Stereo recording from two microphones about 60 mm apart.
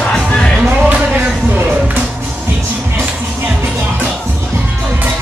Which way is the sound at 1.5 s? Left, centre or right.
Right.